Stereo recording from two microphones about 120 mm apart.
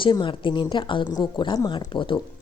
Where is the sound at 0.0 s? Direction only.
40° left (ahead or behind).